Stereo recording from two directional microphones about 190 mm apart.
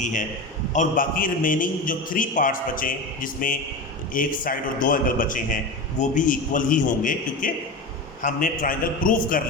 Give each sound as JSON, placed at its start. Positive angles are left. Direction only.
{"t": 0.0, "sound": "a man's voice", "side_deg": 40}